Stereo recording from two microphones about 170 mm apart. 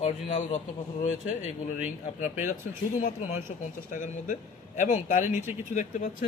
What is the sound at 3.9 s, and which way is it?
Speech, 50° left (ahead or behind).